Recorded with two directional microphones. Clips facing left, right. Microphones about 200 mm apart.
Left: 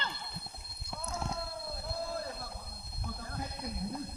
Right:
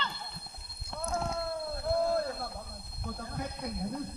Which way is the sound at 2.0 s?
65° right (ahead or behind).